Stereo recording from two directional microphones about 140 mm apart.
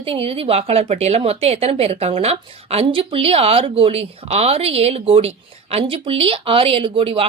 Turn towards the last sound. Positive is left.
turn(degrees=-40)  # may be behind; listen again after turning